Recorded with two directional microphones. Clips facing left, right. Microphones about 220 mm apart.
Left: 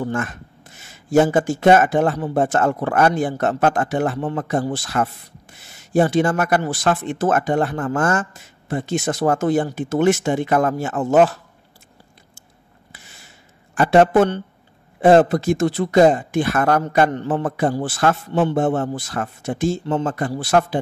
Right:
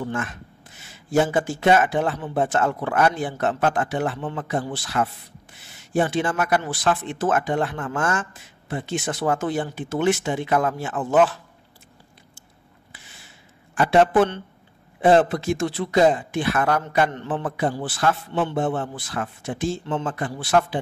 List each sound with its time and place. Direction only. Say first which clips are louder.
0.1 s speech: left 4 dB; 45° left (ahead or behind)
13.7 s speech: left 3 dB; 45° left (ahead or behind)